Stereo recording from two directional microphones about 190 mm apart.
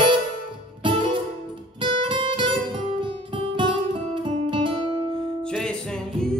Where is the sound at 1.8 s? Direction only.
25° right (ahead or behind).